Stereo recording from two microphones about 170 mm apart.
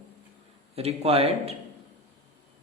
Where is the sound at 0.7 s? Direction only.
35° right (ahead or behind).